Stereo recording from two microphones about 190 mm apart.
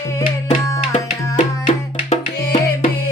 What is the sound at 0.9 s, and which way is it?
Music, 40° left (ahead or behind).